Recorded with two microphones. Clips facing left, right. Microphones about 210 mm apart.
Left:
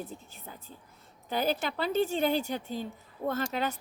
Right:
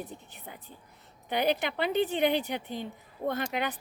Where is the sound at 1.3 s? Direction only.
70° right (ahead or behind).